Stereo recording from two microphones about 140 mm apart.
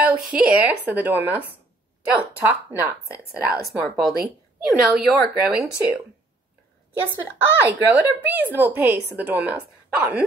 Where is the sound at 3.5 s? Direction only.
Centre (ahead or behind).